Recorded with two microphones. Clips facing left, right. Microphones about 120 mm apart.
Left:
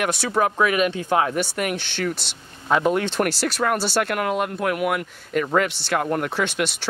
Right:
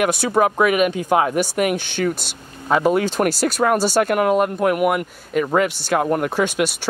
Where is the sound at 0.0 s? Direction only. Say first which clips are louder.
Right 4 dB; 10° right (ahead or behind).